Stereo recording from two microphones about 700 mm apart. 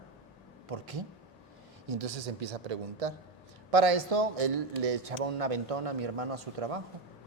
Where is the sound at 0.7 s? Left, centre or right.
Right.